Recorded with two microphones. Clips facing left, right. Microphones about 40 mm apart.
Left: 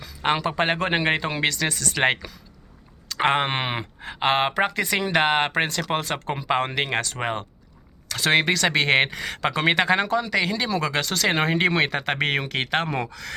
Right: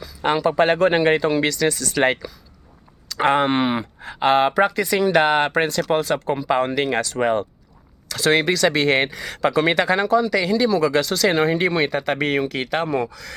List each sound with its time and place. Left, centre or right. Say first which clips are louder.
0.0 s speech: right 4 dB; left
3.2 s speech: right 4 dB; left
12.0 s speech: right 3 dB; left
13.1 s speech: left 1 dB; left